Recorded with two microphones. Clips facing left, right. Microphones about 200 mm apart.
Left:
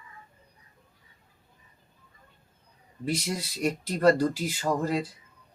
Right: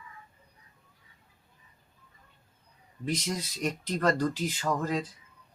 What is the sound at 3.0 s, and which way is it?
Speech, 10° left (ahead or behind).